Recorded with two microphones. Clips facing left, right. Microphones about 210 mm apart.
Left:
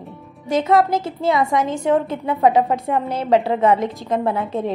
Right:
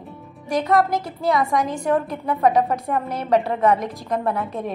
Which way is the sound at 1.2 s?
Centre (ahead or behind).